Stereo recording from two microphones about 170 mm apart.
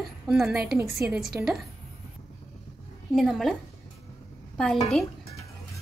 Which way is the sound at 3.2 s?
Centre (ahead or behind).